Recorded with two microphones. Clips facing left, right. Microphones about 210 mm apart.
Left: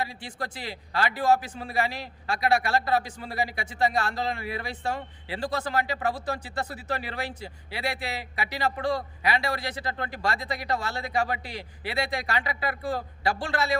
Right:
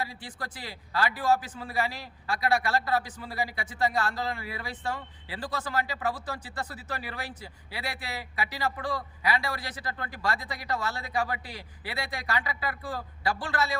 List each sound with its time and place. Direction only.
0.0 s a man's voice: 25° left (ahead or behind)